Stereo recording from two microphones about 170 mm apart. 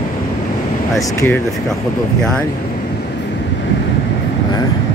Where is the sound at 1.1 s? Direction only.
10° left (ahead or behind).